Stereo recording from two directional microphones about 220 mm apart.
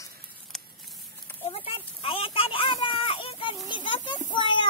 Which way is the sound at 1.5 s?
25° left (ahead or behind).